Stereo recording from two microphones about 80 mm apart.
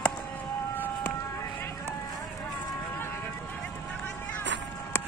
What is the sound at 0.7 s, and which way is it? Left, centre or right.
Siren, left.